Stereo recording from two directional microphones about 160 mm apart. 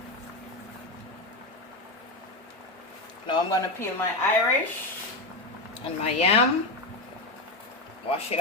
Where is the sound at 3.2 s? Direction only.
20° left (ahead or behind).